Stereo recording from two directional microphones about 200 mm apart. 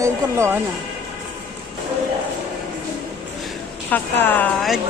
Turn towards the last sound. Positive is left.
turn(degrees=0)  # may be behind; listen again after turning